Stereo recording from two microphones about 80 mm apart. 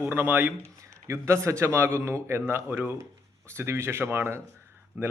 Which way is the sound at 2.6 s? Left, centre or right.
Centre.